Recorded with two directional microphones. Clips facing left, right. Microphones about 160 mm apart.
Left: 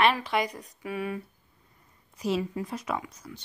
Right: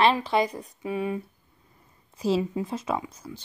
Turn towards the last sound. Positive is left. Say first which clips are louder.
# right 3 dB
turn(degrees=-30)  # may be behind; listen again after turning